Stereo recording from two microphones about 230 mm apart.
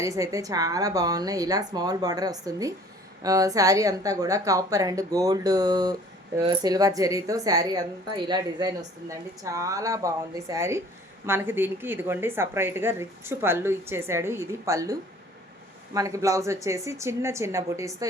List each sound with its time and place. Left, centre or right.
0.0 s speech: centre
16.0 s speech: centre